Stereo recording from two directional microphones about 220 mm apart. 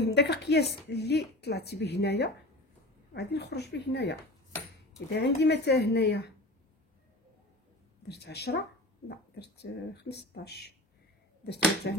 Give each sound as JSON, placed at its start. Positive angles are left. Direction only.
{"t": 0.0, "sound": "a woman's voice", "side_deg": 50}
{"t": 8.1, "sound": "a woman's voice", "side_deg": 50}